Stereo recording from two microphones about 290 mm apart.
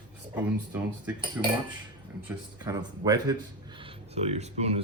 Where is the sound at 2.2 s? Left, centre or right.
Centre.